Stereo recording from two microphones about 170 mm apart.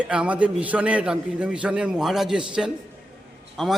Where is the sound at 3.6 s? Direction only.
Centre (ahead or behind).